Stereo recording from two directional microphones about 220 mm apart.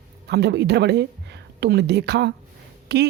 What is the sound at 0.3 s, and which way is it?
A woman's voice, 50° right (ahead or behind).